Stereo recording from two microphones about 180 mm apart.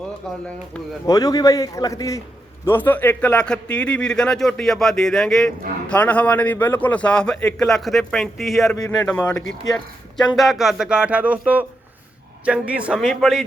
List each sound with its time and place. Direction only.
0.3 s speech: 5° left (ahead or behind)
1.0 s a man's voice: 20° left (ahead or behind); by 13.4 s centre (ahead or behind)